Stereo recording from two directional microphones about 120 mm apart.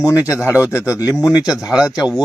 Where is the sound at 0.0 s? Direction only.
25° left (ahead or behind).